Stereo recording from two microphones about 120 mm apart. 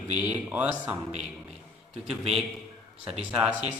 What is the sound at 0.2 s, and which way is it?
Speech, 15° right (ahead or behind).